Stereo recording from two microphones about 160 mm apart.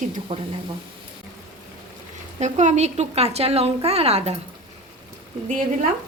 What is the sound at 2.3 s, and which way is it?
A woman's voice, 45° right (ahead or behind).